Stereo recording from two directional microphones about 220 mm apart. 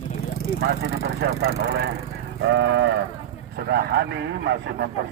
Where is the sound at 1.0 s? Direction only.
45° right (ahead or behind).